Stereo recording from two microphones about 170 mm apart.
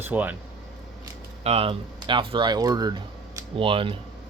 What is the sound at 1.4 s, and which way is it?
Speech, 35° right (ahead or behind).